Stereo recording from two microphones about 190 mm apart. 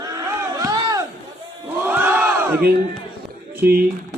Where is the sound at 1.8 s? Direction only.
10° right (ahead or behind).